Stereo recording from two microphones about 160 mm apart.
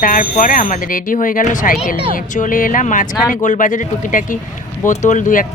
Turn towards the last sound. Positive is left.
turn(degrees=55)  # may be behind; listen again after turning